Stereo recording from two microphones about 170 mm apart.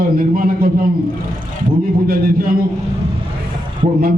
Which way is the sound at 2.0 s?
60° right (ahead or behind).